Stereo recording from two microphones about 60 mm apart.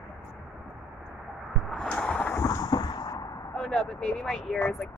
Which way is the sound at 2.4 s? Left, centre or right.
Left.